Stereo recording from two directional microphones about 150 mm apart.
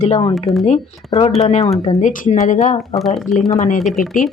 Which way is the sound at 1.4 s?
45° left (ahead or behind).